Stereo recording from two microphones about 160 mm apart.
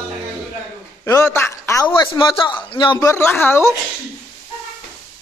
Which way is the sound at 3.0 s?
15° left (ahead or behind).